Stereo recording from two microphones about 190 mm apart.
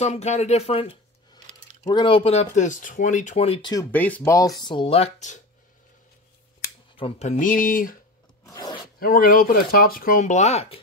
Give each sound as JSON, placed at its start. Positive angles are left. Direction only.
{"t": 0.0, "sound": "speech", "side_deg": 35}
{"t": 3.7, "sound": "speech", "side_deg": 10}
{"t": 4.6, "sound": "speech", "side_deg": 25}
{"t": 7.0, "sound": "speech", "side_deg": 30}
{"t": 8.5, "sound": "a sound", "side_deg": 20}
{"t": 9.0, "sound": "speech", "side_deg": 50}